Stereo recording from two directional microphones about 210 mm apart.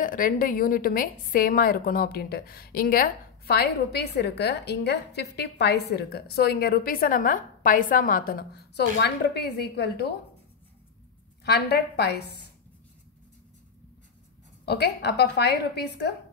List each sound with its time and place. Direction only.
0.0 s a woman's voice: 40° left (ahead or behind)
11.4 s a woman's voice: 50° left (ahead or behind)
14.7 s a woman's voice: 50° left (ahead or behind)